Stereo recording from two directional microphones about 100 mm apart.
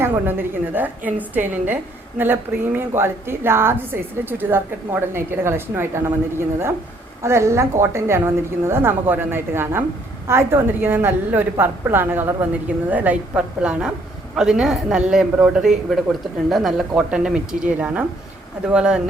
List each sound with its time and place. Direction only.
0.0 s a woman's voice: 20° right (ahead or behind)
7.2 s a woman's voice: 30° right (ahead or behind); by 19.0 s 10° right (ahead or behind)